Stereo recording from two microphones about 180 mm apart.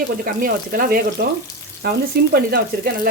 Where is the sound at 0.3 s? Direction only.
55° right (ahead or behind).